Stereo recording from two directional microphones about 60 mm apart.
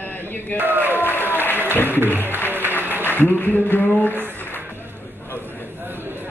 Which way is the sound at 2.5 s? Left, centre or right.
Right.